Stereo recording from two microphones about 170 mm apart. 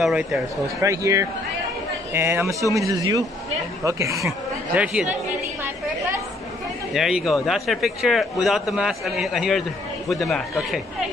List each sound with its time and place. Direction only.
0.0 s a man's voice: centre (ahead or behind)
0.7 s speech: 20° right (ahead or behind)
4.7 s a man's voice: 5° right (ahead or behind)
6.9 s a man's voice: 5° right (ahead or behind)